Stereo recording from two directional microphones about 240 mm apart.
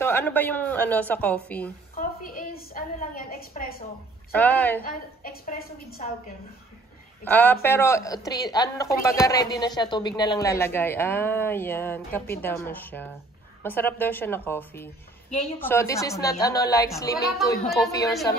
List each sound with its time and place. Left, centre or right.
0.0 s speech: centre
2.0 s a woman's voice: left
4.3 s speech: centre
4.8 s speech: left
7.2 s speech: centre
17.6 s a woman's voice: centre